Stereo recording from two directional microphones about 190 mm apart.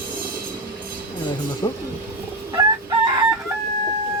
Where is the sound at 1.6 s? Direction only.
20° left (ahead or behind).